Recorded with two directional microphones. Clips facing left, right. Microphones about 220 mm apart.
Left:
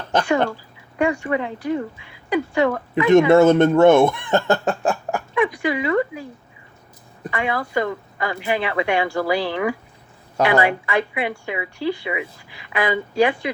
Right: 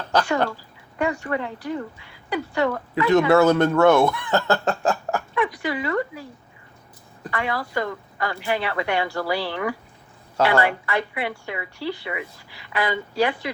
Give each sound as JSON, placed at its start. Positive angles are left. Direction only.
{"t": 0.1, "sound": "speech", "side_deg": 20}
{"t": 7.3, "sound": "speech", "side_deg": 20}